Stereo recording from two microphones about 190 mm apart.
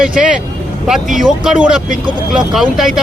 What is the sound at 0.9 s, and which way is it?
Speech, centre (ahead or behind).